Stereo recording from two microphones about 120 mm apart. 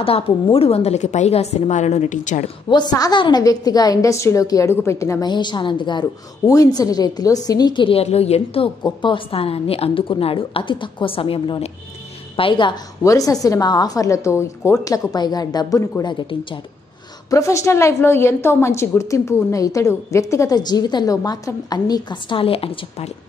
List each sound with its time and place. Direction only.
0.0 s a woman's voice: 50° left (ahead or behind); by 2.4 s 90° left
2.7 s a woman's voice: 35° left (ahead or behind)
5.3 s a woman's voice: 40° left (ahead or behind)
13.0 s a woman's voice: 30° left (ahead or behind); by 16.6 s 45° left (ahead or behind)
17.3 s a woman's voice: 25° left (ahead or behind); by 23.1 s 55° left (ahead or behind)